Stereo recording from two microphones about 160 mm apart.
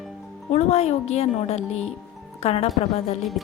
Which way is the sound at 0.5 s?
40° left (ahead or behind).